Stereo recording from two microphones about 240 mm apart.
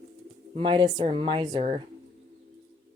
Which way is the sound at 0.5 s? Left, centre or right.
Right.